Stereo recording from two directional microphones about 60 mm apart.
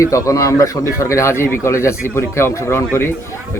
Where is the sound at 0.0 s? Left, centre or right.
Left.